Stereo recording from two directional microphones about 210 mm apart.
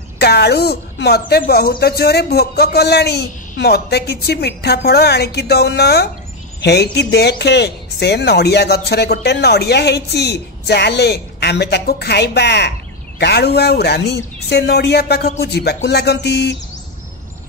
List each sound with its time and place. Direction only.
0.2 s speech: 50° left (ahead or behind)